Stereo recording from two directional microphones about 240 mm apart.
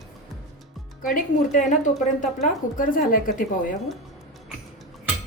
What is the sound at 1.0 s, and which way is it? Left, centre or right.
A woman's voice, left.